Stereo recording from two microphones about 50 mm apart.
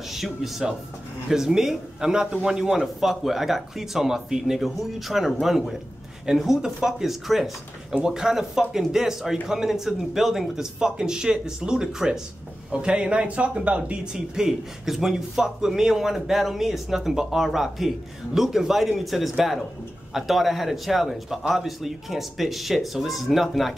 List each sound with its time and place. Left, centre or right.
0.1 s a man's voice: centre; by 14.0 s right
14.1 s a man's voice: centre